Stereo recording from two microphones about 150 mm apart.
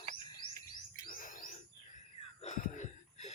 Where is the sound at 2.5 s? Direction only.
55° left (ahead or behind).